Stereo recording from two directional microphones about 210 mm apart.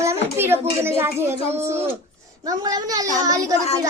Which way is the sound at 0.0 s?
10° right (ahead or behind).